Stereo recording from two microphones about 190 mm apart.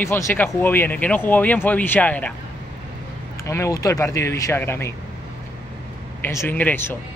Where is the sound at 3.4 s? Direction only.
15° left (ahead or behind).